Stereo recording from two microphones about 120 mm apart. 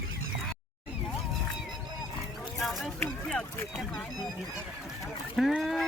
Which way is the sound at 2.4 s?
Centre (ahead or behind).